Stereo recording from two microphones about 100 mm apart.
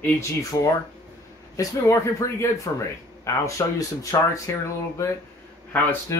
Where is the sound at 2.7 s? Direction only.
45° left (ahead or behind).